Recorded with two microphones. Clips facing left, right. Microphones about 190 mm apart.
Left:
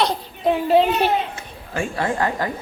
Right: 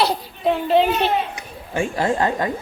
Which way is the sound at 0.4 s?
10° left (ahead or behind).